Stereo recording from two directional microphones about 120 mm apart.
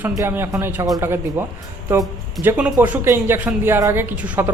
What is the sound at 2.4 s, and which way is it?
Speech, 20° right (ahead or behind).